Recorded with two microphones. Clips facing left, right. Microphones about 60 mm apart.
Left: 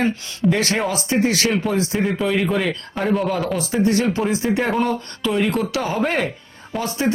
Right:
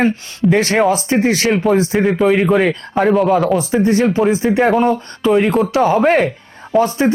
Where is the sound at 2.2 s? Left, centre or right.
Right.